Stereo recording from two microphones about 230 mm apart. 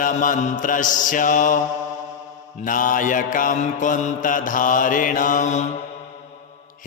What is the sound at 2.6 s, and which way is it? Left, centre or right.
Mantra, left.